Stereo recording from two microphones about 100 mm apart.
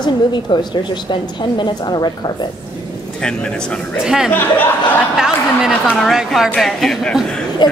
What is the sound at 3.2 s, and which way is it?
Speech, 10° left (ahead or behind).